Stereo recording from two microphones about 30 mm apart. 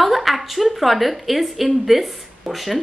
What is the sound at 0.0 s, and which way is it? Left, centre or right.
A woman's voice, centre.